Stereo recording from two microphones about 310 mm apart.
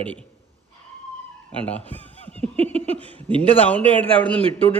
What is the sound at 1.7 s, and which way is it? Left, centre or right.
Chuckle, centre.